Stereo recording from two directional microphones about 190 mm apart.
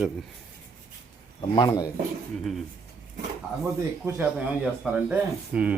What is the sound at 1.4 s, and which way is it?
Speech, 20° left (ahead or behind).